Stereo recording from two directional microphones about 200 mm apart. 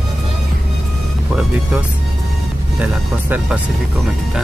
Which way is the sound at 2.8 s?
5° right (ahead or behind).